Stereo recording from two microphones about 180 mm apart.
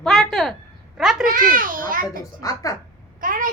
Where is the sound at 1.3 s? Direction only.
50° right (ahead or behind).